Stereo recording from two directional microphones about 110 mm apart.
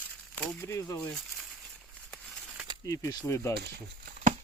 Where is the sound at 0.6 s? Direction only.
25° left (ahead or behind).